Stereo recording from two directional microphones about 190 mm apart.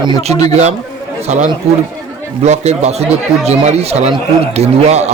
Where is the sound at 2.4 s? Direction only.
35° right (ahead or behind).